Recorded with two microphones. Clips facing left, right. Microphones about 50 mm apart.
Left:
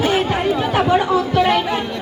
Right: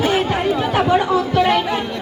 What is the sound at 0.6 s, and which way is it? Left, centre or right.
Chatter, left.